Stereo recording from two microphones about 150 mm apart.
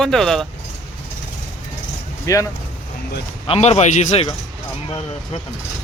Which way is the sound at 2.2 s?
20° left (ahead or behind).